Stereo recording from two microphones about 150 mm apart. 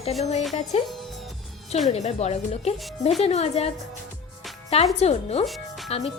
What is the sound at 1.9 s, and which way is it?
Speech, 45° left (ahead or behind).